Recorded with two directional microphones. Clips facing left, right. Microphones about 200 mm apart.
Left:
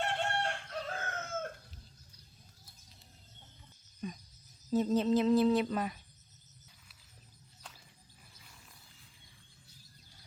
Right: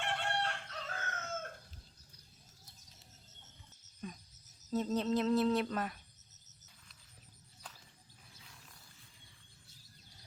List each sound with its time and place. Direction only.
0.0 s chicken: 45° left (ahead or behind)
0.9 s chicken: 55° left (ahead or behind)
4.0 s wild animals: centre (ahead or behind)
4.7 s speech: centre (ahead or behind)